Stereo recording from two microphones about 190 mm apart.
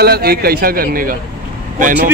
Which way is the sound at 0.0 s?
55° right (ahead or behind).